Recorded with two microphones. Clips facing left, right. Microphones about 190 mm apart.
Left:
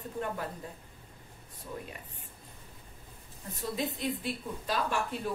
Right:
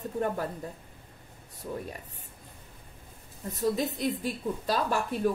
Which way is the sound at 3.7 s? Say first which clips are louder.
Right 4 dB; 40° right (ahead or behind).